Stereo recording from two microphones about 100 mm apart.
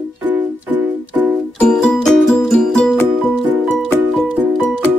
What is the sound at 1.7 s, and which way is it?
Music, 5° left (ahead or behind).